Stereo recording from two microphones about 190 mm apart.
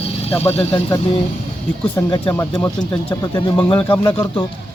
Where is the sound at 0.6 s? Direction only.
25° left (ahead or behind).